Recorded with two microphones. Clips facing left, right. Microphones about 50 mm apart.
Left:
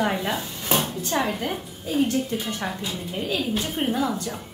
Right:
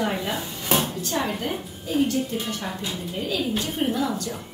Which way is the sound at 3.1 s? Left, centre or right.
Left.